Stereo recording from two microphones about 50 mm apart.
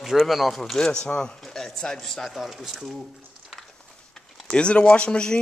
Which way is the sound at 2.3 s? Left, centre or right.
Centre.